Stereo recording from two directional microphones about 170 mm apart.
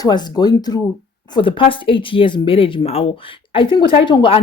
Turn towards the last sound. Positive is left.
turn(degrees=30)  # may be behind; listen again after turning